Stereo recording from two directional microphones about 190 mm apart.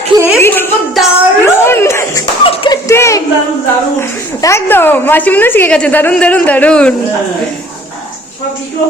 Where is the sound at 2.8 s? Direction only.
15° left (ahead or behind).